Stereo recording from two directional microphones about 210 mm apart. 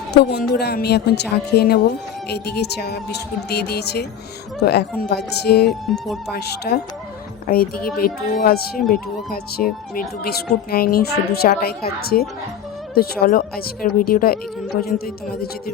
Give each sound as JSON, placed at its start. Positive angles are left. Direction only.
{"t": 0.1, "sound": "speech", "side_deg": 50}
{"t": 5.8, "sound": "speech", "side_deg": 0}
{"t": 6.3, "sound": "speech", "side_deg": 50}